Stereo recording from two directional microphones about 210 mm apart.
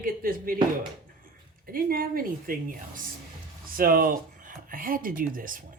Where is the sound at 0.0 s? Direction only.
45° right (ahead or behind).